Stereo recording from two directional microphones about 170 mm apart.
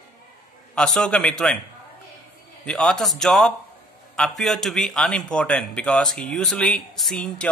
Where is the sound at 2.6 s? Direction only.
5° left (ahead or behind).